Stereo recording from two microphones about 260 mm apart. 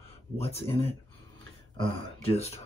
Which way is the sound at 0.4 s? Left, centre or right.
Left.